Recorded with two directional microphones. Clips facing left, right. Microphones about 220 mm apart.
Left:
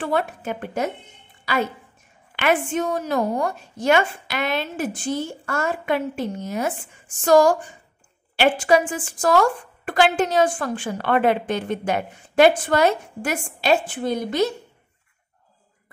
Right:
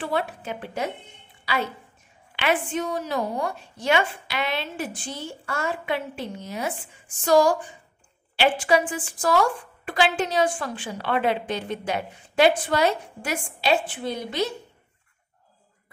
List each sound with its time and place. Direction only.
0.0 s a woman's voice: 50° left (ahead or behind)